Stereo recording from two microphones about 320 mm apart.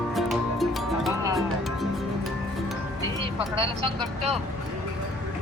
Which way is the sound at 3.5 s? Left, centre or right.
Centre.